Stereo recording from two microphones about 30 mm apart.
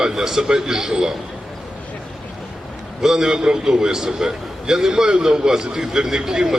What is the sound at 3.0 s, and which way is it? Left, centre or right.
A man's voice, centre.